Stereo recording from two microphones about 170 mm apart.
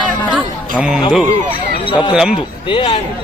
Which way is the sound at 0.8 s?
5° right (ahead or behind).